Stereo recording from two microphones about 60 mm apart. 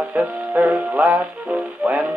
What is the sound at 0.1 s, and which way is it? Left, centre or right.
Music, right.